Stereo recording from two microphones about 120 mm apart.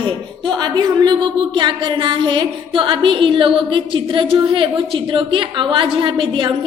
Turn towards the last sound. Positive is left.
turn(degrees=-45)  # may be behind; listen again after turning